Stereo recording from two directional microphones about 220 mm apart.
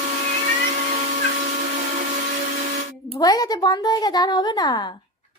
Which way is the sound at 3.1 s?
15° left (ahead or behind).